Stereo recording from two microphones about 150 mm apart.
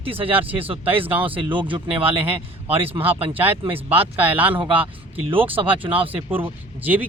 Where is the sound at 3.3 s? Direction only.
15° right (ahead or behind).